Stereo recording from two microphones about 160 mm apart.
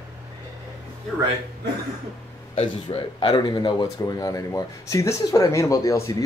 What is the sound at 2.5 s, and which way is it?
Speech, 35° left (ahead or behind).